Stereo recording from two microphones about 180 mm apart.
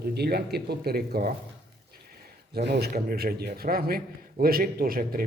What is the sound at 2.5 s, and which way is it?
A man's voice, 65° right (ahead or behind).